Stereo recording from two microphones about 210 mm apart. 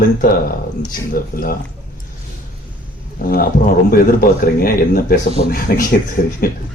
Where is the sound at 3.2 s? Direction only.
45° left (ahead or behind).